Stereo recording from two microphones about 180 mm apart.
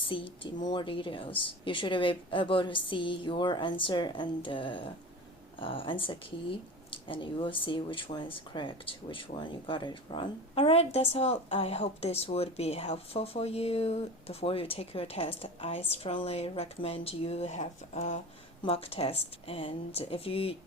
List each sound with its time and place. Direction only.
0.0 s a woman's voice: 30° left (ahead or behind)